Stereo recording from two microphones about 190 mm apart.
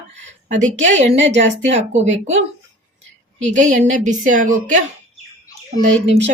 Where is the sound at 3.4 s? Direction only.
40° right (ahead or behind).